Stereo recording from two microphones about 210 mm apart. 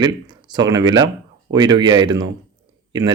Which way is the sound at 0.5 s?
20° right (ahead or behind).